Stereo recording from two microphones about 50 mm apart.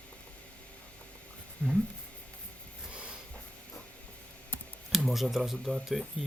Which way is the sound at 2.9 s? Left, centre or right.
Right.